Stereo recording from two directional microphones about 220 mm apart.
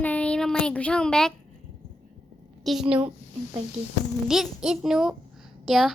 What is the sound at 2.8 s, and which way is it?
Speech, 25° right (ahead or behind).